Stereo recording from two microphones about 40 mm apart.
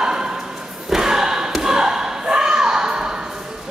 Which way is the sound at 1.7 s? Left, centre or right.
Centre.